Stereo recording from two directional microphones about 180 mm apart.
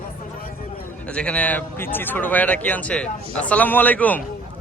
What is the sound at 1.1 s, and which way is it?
Speech, 5° left (ahead or behind).